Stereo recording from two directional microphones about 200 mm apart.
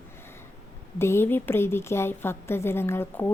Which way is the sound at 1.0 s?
10° left (ahead or behind).